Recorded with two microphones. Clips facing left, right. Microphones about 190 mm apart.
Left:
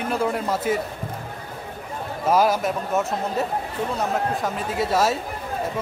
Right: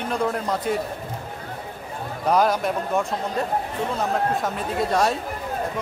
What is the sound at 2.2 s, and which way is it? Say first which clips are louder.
Speech: left 1 dB; 5° left (ahead or behind).